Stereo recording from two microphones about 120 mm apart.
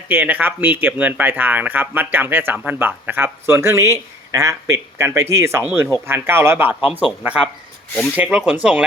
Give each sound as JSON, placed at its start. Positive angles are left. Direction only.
{"t": 0.1, "sound": "speech", "side_deg": -15}
{"t": 8.1, "sound": "speech", "side_deg": -15}